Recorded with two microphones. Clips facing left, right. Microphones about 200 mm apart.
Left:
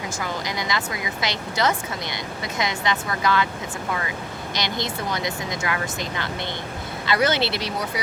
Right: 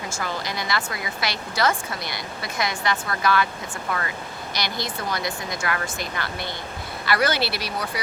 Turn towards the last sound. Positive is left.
turn(degrees=20)  # may be behind; listen again after turning